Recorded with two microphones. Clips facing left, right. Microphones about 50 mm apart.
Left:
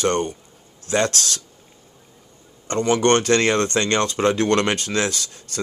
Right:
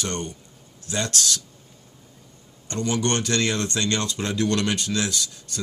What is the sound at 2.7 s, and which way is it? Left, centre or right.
Speech, left.